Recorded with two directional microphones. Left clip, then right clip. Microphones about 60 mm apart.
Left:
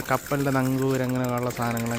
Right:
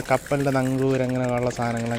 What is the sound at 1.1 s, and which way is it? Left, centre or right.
Speech, centre.